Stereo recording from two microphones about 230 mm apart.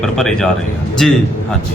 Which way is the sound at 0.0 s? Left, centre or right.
Centre.